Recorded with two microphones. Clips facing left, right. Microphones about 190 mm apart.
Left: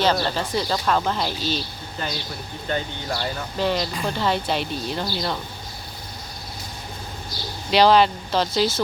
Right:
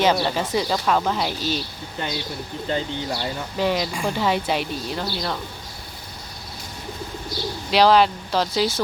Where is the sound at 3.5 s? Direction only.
10° right (ahead or behind).